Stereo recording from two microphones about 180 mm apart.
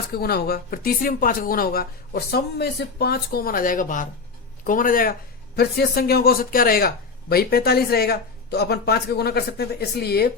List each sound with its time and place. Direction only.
0.1 s speech: 60° left (ahead or behind)
5.5 s speech: 60° left (ahead or behind)